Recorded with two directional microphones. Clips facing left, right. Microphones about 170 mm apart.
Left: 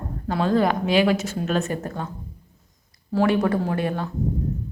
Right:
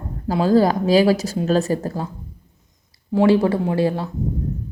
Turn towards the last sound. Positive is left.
turn(degrees=-30)  # may be behind; listen again after turning